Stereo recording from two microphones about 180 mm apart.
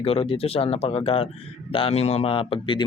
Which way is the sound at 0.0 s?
35° left (ahead or behind).